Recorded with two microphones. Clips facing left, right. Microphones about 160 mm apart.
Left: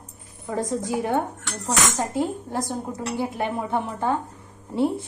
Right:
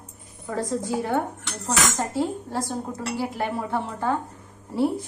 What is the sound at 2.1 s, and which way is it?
A woman's voice, 15° left (ahead or behind).